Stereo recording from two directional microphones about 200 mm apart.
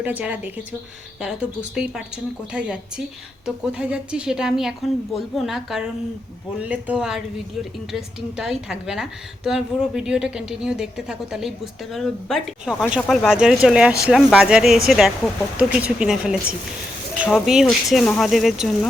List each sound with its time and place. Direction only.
0.0 s a woman's voice: 5° right (ahead or behind)